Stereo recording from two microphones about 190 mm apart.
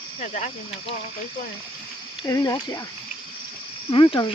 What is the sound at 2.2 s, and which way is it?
Speech, 15° left (ahead or behind).